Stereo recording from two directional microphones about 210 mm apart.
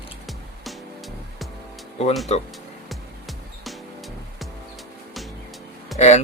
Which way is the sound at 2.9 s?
Centre (ahead or behind).